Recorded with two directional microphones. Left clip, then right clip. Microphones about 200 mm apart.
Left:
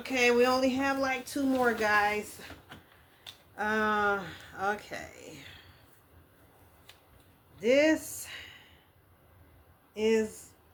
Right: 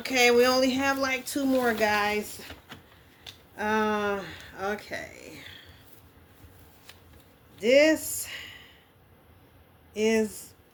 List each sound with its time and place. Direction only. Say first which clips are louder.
0.0 s speech: right 4 dB; 25° right (ahead or behind)
7.6 s speech: right 4 dB; 20° right (ahead or behind)
9.9 s speech: right 2 dB; 20° right (ahead or behind)